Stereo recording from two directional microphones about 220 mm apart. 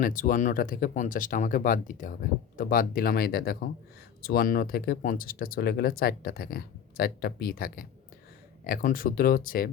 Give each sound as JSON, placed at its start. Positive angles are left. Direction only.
{"t": 0.0, "sound": "speech", "side_deg": 40}